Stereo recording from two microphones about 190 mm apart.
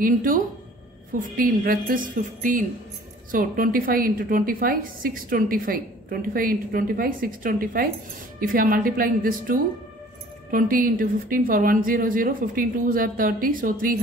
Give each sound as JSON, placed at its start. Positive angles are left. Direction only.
{"t": 0.0, "sound": "a woman's voice", "side_deg": -45}